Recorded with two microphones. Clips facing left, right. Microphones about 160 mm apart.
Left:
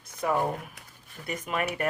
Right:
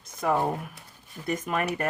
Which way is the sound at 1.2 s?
45° right (ahead or behind).